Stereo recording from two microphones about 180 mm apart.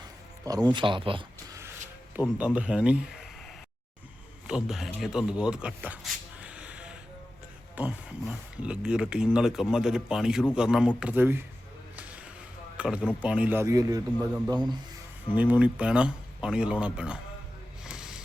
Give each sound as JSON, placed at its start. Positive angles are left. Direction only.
{"t": 0.4, "sound": "speech", "side_deg": -20}
{"t": 2.4, "sound": "speech", "side_deg": -5}
{"t": 4.4, "sound": "speech", "side_deg": -5}
{"t": 12.7, "sound": "speech", "side_deg": -5}
{"t": 15.4, "sound": "speech", "side_deg": -10}
{"t": 17.8, "sound": "a sound", "side_deg": -5}